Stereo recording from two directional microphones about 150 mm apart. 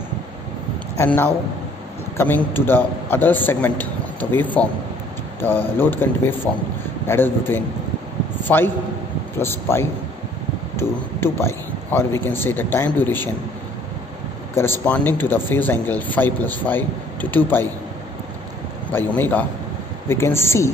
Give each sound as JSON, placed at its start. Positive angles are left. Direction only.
{"t": 0.9, "sound": "speech", "side_deg": 15}
{"t": 14.5, "sound": "speech", "side_deg": 15}
{"t": 18.9, "sound": "speech", "side_deg": 15}